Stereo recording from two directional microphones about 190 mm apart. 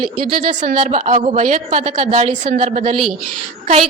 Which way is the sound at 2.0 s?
30° right (ahead or behind).